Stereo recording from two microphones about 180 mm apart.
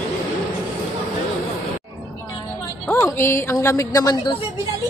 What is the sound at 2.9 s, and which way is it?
Speech, 10° left (ahead or behind).